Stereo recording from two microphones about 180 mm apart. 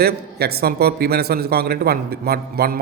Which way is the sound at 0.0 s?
60° right (ahead or behind).